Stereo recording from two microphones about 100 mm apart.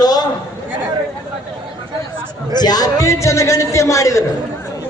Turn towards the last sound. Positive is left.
turn(degrees=30)  # may be behind; listen again after turning